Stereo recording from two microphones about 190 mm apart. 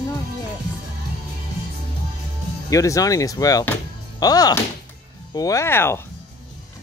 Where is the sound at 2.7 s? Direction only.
15° left (ahead or behind).